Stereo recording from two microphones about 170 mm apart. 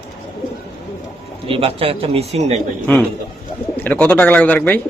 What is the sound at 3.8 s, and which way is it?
Speech, 10° left (ahead or behind).